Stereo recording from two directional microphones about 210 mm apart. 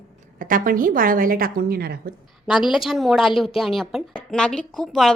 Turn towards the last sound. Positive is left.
turn(degrees=0)  # may be behind; listen again after turning